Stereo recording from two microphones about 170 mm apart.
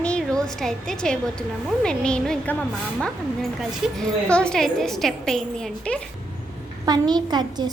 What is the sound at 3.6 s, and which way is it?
A woman's voice, centre (ahead or behind).